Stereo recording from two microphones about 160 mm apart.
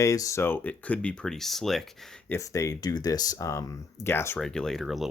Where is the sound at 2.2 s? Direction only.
20° left (ahead or behind).